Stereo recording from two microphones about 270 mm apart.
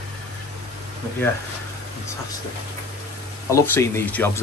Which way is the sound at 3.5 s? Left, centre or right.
Centre.